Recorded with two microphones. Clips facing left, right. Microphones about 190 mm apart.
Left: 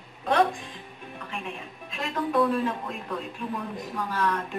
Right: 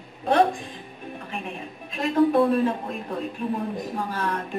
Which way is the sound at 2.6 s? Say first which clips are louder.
Right 4 dB; 35° right (ahead or behind).